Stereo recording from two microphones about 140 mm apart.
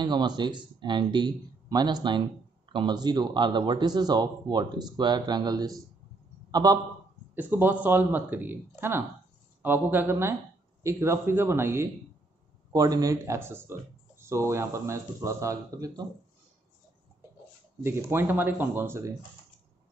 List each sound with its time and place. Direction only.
0.0 s a man's voice: 30° right (ahead or behind)
7.3 s a man's voice: 15° right (ahead or behind)
17.8 s a man's voice: 15° right (ahead or behind)